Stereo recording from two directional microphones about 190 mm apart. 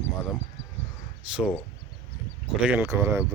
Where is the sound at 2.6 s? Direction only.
10° right (ahead or behind).